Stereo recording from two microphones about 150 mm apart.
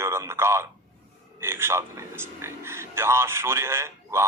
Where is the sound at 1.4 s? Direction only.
15° right (ahead or behind).